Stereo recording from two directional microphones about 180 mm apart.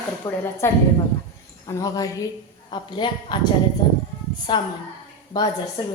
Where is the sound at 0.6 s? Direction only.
15° left (ahead or behind).